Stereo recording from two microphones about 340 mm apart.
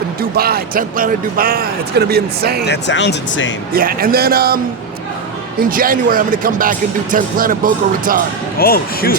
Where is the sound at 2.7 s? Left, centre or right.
Left.